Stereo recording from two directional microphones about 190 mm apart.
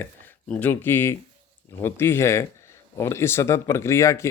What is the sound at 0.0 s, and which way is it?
Speech, 10° left (ahead or behind).